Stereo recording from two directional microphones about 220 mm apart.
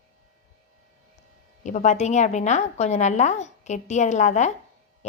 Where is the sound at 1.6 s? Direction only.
35° left (ahead or behind).